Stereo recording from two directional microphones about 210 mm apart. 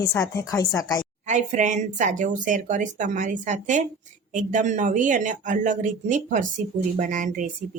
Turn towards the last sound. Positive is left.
turn(degrees=-40)  # may be behind; listen again after turning